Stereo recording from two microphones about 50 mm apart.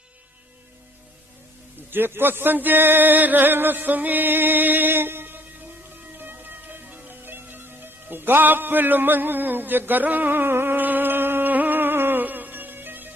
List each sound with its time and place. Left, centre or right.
1.9 s speech: right
6.1 s music: right